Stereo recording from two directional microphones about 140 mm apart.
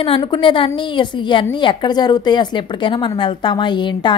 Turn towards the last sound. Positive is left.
turn(degrees=35)  # may be behind; listen again after turning